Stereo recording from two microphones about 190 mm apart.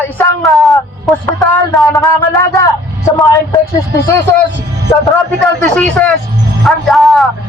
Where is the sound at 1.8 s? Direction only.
15° left (ahead or behind).